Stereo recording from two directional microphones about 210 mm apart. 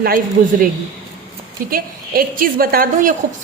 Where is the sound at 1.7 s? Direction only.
40° right (ahead or behind).